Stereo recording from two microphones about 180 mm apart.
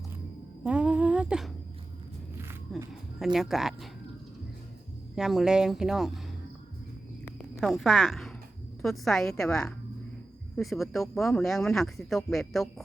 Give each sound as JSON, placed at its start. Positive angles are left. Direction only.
{"t": 0.6, "sound": "humming", "side_deg": -5}
{"t": 2.4, "sound": "a sound", "side_deg": -15}
{"t": 3.3, "sound": "speech", "side_deg": 0}
{"t": 5.1, "sound": "speech", "side_deg": 0}
{"t": 7.6, "sound": "speech", "side_deg": 0}